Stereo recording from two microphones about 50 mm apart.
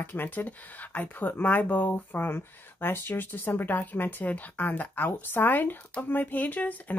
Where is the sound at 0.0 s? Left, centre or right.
Left.